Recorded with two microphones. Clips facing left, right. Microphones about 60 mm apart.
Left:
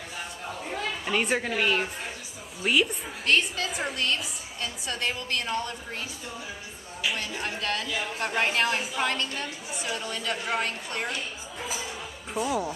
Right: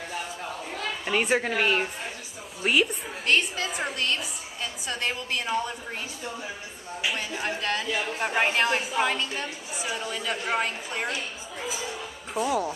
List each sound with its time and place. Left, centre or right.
1.0 s a woman's voice: centre
2.6 s a woman's voice: centre
7.1 s a woman's voice: centre